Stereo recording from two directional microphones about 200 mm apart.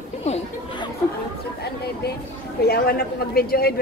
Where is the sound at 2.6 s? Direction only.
50° left (ahead or behind).